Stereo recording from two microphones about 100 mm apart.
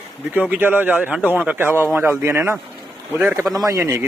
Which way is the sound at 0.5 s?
20° right (ahead or behind).